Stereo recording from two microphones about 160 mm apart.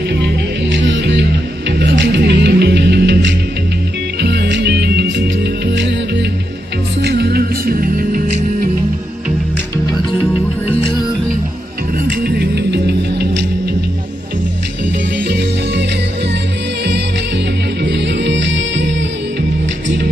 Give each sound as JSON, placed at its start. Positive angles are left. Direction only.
{"t": 0.7, "sound": "music", "side_deg": -90}
{"t": 12.2, "sound": "music", "side_deg": -90}
{"t": 15.2, "sound": "music", "side_deg": -90}
{"t": 17.8, "sound": "music", "side_deg": -90}